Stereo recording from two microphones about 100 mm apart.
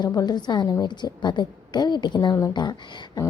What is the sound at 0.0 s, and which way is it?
A woman's voice, 40° left (ahead or behind).